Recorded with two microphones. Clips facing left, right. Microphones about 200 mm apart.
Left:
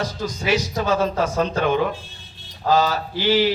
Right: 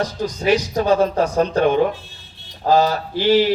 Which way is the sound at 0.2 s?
40° right (ahead or behind).